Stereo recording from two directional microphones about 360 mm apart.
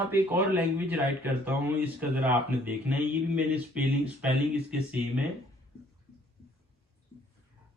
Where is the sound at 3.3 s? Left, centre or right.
Centre.